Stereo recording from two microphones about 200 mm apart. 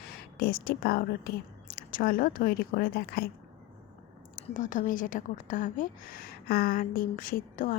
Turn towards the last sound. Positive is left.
turn(degrees=45)  # may be behind; listen again after turning